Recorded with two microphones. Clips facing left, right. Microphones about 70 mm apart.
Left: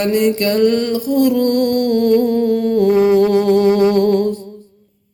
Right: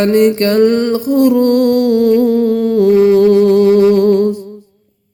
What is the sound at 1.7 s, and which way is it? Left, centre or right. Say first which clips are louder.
Humming: right 3 dB; centre.